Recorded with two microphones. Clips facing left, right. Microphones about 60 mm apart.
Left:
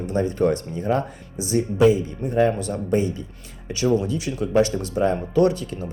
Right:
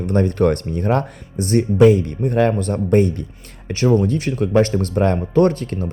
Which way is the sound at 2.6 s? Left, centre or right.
Right.